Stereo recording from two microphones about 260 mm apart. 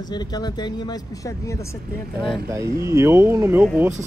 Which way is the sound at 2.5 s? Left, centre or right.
Centre.